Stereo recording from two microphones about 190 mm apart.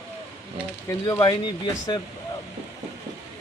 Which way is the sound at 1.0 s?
20° left (ahead or behind).